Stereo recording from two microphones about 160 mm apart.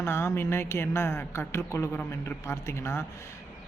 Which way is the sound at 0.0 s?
15° left (ahead or behind).